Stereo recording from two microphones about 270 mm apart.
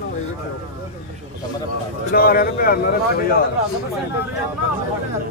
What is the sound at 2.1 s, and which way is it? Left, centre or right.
Speech, left.